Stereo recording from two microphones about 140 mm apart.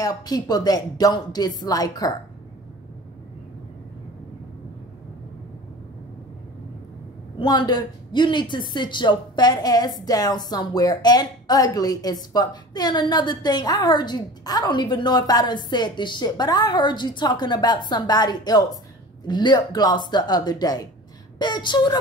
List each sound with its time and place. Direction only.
0.0 s speech: 30° left (ahead or behind)
7.3 s speech: 30° left (ahead or behind)